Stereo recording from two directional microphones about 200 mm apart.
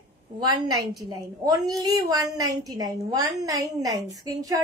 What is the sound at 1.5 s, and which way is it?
A woman's voice, 20° right (ahead or behind).